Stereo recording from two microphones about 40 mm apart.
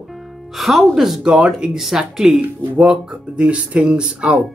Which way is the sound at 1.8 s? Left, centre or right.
Centre.